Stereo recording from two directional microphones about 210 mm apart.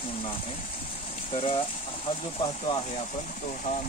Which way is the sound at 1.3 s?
25° left (ahead or behind).